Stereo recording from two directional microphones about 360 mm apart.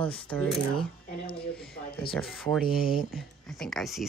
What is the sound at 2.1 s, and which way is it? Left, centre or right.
Speech, centre.